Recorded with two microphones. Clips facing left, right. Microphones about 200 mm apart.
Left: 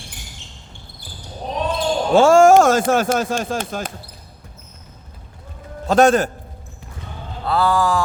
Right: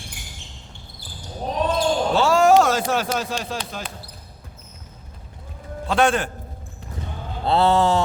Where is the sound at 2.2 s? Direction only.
50° left (ahead or behind).